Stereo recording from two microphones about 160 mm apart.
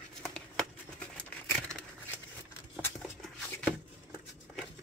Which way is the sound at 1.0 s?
5° left (ahead or behind).